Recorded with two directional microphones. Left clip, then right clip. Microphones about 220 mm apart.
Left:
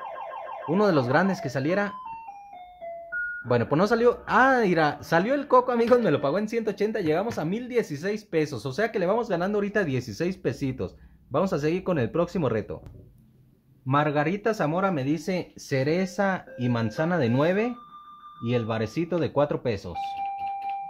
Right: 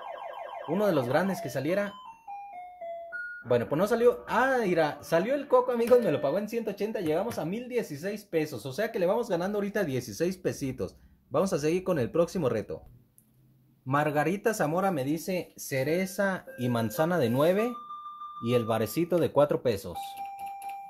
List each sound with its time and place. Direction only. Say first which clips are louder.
0.7 s speech: left 4 dB; 15° left (ahead or behind)
3.4 s speech: left 2 dB; 15° left (ahead or behind)
13.8 s speech: left 3 dB; centre (ahead or behind)